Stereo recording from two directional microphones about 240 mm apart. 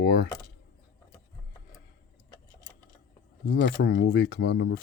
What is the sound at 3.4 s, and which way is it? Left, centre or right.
Speech, left.